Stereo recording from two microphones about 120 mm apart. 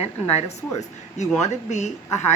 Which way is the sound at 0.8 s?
75° left (ahead or behind).